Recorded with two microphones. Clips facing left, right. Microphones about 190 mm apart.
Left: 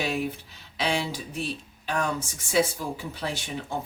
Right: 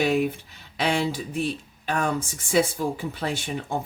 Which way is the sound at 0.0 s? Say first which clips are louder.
Right 6 dB; 55° right (ahead or behind).